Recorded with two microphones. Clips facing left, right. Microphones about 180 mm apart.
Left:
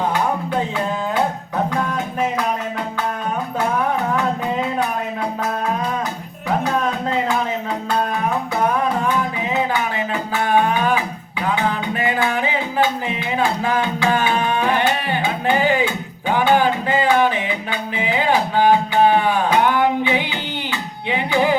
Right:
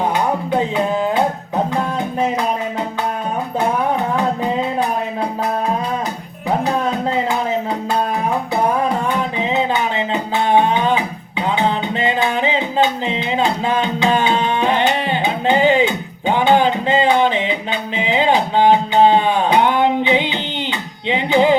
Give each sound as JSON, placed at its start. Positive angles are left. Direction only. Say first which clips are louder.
{"t": 0.5, "sound": "music", "louder": "right 4 dB", "side_deg": -20}
{"t": 9.4, "sound": "music", "louder": "right 3 dB", "side_deg": -20}